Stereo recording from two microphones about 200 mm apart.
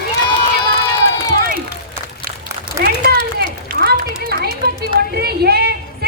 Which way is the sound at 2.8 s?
45° right (ahead or behind).